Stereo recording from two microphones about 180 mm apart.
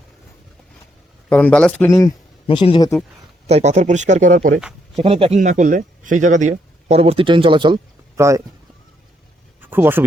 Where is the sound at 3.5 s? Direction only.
40° right (ahead or behind).